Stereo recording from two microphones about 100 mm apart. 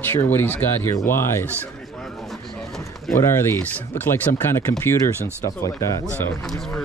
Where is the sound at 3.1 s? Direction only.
25° left (ahead or behind).